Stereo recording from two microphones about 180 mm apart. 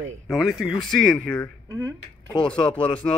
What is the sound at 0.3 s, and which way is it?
Speech, centre (ahead or behind).